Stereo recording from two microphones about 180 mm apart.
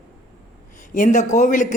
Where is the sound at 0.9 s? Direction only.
45° left (ahead or behind).